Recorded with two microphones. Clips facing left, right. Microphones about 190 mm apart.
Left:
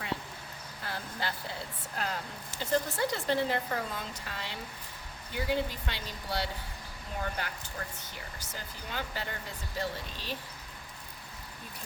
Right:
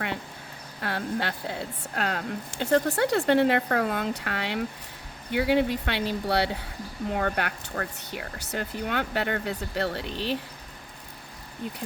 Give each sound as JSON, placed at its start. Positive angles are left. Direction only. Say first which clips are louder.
{"t": 0.8, "sound": "speech", "louder": "right 9 dB", "side_deg": -65}